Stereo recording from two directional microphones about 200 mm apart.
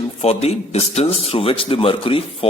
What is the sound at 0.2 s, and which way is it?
A man's voice, 30° left (ahead or behind).